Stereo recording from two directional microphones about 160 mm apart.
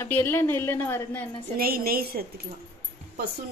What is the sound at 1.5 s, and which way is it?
Speech, 65° right (ahead or behind).